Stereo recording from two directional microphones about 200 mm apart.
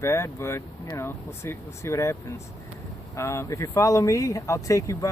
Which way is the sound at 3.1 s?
15° left (ahead or behind).